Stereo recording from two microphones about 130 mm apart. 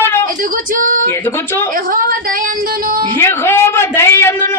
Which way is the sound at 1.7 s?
90° right.